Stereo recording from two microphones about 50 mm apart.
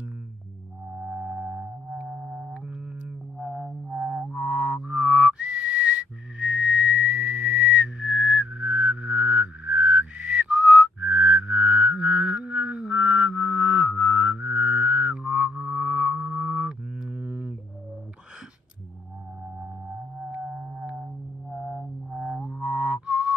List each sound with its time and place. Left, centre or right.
0.9 s music: centre
4.4 s whistling: right
14.5 s music: right
16.2 s sidetone: centre
17.2 s a sound: right
21.5 s music: centre
22.2 s music: centre
22.6 s music: right